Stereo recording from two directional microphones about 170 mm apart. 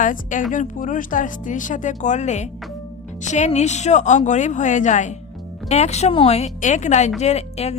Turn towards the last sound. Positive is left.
turn(degrees=40)  # may be behind; listen again after turning